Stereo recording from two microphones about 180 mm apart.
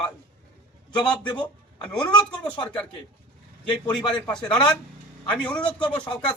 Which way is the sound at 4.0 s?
25° left (ahead or behind).